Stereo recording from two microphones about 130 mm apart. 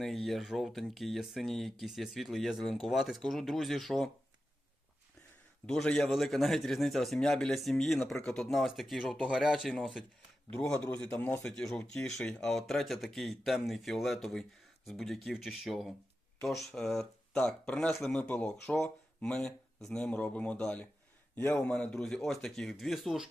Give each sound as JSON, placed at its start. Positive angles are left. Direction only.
{"t": 0.0, "sound": "speech", "side_deg": 0}
{"t": 5.6, "sound": "speech", "side_deg": 5}
{"t": 11.4, "sound": "speech", "side_deg": 5}